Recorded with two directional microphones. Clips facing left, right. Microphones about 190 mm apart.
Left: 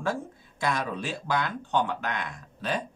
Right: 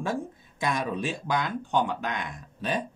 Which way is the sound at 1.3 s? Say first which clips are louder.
Even; 15° right (ahead or behind).